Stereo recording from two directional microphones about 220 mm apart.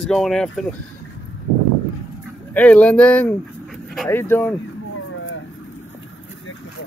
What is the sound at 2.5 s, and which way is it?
Speech, 5° left (ahead or behind).